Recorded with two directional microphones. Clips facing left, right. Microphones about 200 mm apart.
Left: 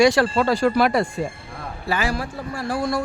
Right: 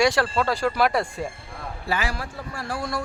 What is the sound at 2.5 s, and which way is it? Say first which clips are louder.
Speech: left 6 dB; 30° left (ahead or behind).